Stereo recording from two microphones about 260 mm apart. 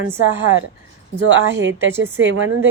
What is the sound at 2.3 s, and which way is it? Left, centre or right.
Speech, right.